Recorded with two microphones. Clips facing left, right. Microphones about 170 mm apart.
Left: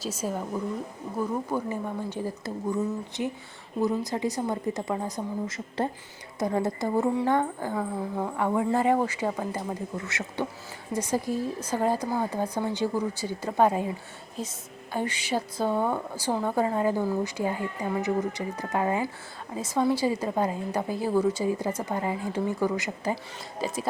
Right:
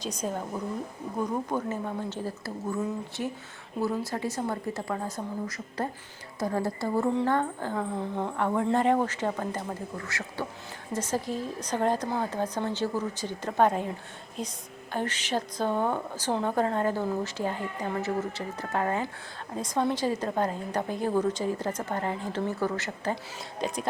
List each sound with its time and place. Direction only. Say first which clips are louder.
0.0 s a woman's voice: left 1 dB; 5° left (ahead or behind)
10.1 s speech: left 3 dB; 20° left (ahead or behind)
10.9 s a woman's voice: left 3 dB; 10° left (ahead or behind)
14.9 s a woman's voice: left 1 dB; 10° left (ahead or behind)